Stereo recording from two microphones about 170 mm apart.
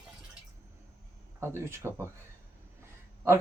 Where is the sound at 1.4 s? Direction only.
15° right (ahead or behind).